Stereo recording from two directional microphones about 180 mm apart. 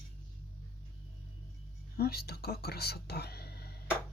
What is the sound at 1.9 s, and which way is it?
Speech, 60° left (ahead or behind).